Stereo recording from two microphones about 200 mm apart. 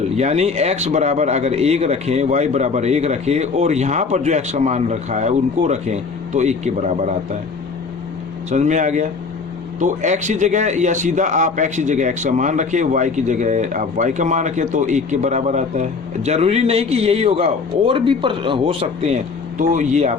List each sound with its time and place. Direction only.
0.2 s a man's voice: 35° right (ahead or behind)
8.4 s a man's voice: 35° right (ahead or behind)